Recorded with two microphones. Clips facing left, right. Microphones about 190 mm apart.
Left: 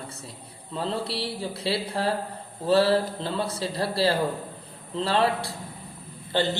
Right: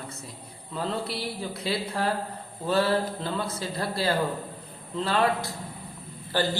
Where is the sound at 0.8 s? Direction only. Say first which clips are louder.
Left 1 dB; 30° left (ahead or behind).